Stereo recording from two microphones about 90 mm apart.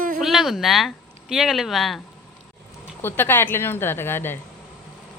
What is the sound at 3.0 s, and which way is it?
A woman's voice, 25° left (ahead or behind).